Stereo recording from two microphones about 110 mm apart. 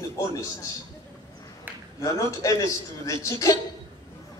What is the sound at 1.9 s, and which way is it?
A man's voice, 30° left (ahead or behind).